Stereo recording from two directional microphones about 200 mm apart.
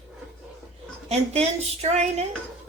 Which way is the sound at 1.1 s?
35° right (ahead or behind).